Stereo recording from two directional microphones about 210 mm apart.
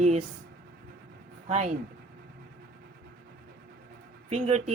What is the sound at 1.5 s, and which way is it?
Speech, 35° right (ahead or behind).